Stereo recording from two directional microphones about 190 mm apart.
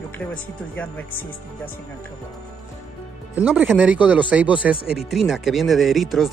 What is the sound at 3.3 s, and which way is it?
Speech, 10° right (ahead or behind).